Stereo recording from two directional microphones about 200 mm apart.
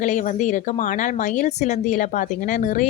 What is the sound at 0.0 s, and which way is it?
A woman's voice, 40° left (ahead or behind).